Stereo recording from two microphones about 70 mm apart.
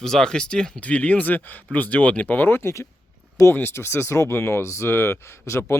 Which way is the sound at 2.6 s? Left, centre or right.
Left.